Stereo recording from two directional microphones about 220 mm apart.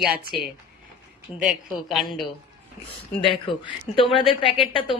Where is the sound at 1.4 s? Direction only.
Centre (ahead or behind).